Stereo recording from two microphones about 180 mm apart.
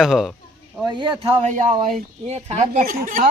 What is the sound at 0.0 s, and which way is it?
Speech, centre (ahead or behind).